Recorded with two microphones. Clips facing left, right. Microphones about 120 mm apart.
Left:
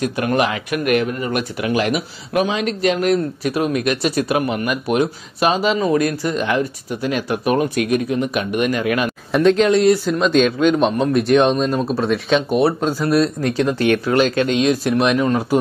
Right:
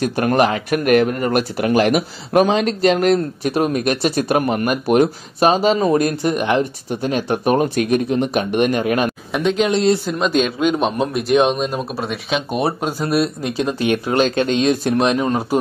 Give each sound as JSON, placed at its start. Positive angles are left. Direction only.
{"t": 0.0, "sound": "speech", "side_deg": -40}
{"t": 9.3, "sound": "speech", "side_deg": -5}
{"t": 9.7, "sound": "speech", "side_deg": -25}
{"t": 10.0, "sound": "speech", "side_deg": -5}